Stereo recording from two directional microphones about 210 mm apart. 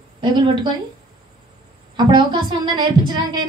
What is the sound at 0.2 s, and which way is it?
Speech, 20° right (ahead or behind).